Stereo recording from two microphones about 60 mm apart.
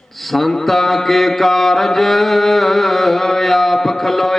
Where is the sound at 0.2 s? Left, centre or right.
Centre.